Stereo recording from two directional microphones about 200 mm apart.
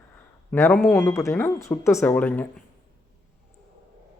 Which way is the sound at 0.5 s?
10° left (ahead or behind).